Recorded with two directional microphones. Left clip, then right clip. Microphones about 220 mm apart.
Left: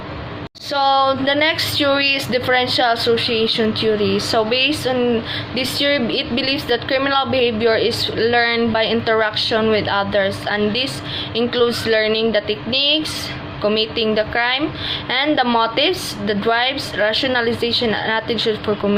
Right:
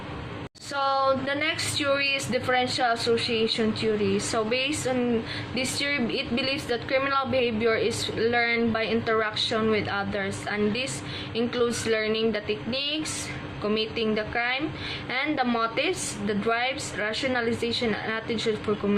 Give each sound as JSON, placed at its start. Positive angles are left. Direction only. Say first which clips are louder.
{"t": 0.7, "sound": "a woman's voice", "louder": "left 9 dB", "side_deg": 0}